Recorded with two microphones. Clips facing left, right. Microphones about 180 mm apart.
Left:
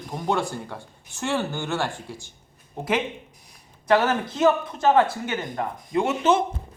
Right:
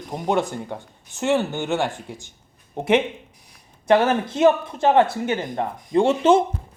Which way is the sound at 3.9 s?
25° right (ahead or behind).